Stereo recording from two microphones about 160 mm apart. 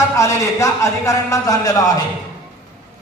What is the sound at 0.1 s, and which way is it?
Speech, 20° left (ahead or behind).